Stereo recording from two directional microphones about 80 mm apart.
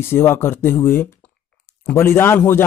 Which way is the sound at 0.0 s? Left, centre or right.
Left.